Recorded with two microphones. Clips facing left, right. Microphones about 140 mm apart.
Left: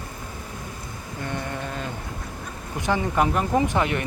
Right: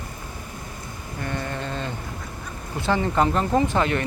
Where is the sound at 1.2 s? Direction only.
15° left (ahead or behind).